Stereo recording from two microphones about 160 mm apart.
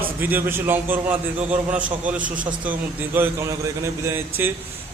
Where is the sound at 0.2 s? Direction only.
10° right (ahead or behind).